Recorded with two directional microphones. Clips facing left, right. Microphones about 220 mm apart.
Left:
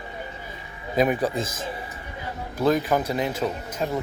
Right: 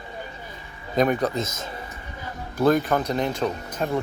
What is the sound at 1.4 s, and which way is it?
Speech, 30° left (ahead or behind).